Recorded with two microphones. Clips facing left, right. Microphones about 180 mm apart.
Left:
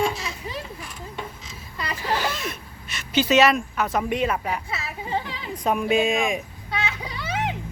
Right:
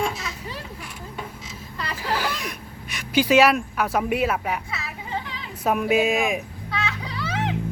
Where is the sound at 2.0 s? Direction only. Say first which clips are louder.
Left 1 dB; 10° right (ahead or behind).